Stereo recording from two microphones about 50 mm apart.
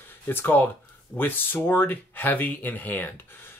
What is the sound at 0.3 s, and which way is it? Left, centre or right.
Speech, left.